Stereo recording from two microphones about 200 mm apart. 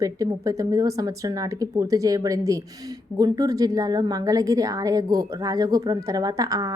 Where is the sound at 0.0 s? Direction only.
20° right (ahead or behind).